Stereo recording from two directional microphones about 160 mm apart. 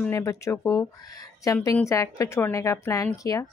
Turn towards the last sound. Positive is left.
turn(degrees=20)  # may be behind; listen again after turning